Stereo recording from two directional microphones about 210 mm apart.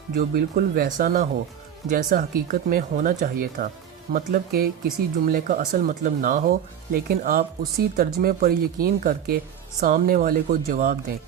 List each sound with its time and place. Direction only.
0.2 s speech: 45° right (ahead or behind)